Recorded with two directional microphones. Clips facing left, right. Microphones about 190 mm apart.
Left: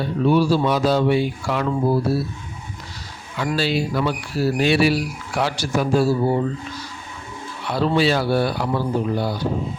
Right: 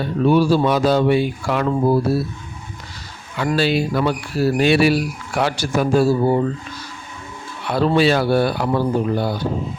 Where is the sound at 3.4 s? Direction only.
60° right (ahead or behind).